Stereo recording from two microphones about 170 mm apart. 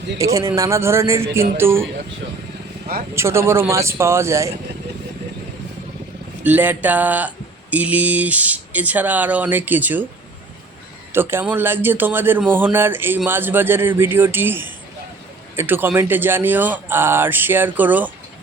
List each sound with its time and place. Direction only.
0.2 s speech: 20° right (ahead or behind)
3.2 s speech: 15° right (ahead or behind)
6.4 s speech: 10° right (ahead or behind)
11.1 s speech: 15° right (ahead or behind)